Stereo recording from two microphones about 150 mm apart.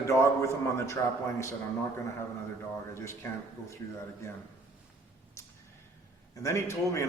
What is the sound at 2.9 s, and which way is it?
A man's voice, 20° left (ahead or behind).